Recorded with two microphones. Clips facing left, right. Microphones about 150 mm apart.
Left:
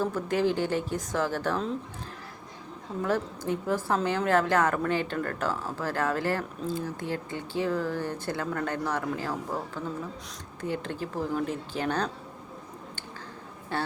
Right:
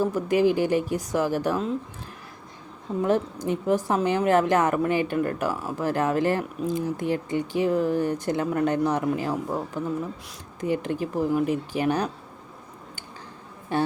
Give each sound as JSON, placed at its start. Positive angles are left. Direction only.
{"t": 0.0, "sound": "a woman's voice", "side_deg": -10}
{"t": 3.0, "sound": "a woman's voice", "side_deg": -20}
{"t": 13.7, "sound": "a woman's voice", "side_deg": -15}